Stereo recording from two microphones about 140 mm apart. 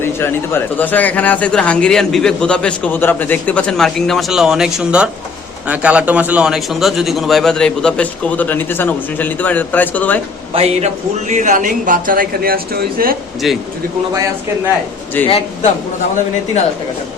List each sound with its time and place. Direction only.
0.0 s a man's voice: 15° left (ahead or behind)
10.5 s a man's voice: 50° right (ahead or behind); by 13.1 s 90° right
15.2 s speech: 10° left (ahead or behind)